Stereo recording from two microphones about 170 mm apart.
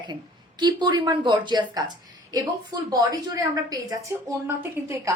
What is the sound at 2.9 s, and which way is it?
A woman's voice, 20° right (ahead or behind).